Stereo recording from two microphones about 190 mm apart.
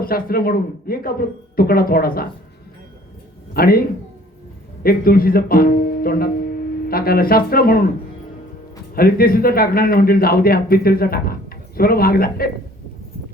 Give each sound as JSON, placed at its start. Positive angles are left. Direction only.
{"t": 0.0, "sound": "a man's voice", "side_deg": 50}
{"t": 3.5, "sound": "a man's voice", "side_deg": 50}
{"t": 9.0, "sound": "a man's voice", "side_deg": 50}